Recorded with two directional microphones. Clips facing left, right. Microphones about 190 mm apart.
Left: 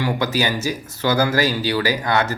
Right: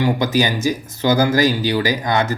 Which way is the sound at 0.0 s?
20° right (ahead or behind).